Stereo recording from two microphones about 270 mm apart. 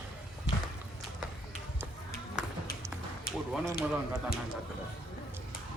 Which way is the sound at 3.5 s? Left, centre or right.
Centre.